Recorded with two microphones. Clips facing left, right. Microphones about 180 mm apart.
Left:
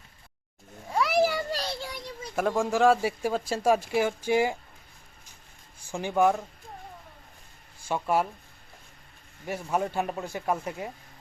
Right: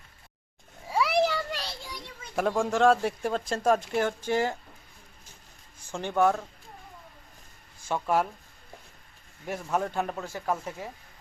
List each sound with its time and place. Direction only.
0.9 s a sound: 5° right (ahead or behind)
1.5 s child singing: 40° left (ahead or behind)
2.3 s speech: centre (ahead or behind)
5.9 s speech: 10° left (ahead or behind)
7.9 s speech: 10° left (ahead or behind)
9.5 s speech: 5° left (ahead or behind)